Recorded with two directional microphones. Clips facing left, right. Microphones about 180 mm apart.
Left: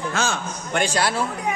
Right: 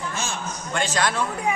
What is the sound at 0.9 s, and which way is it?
Speech, 10° left (ahead or behind).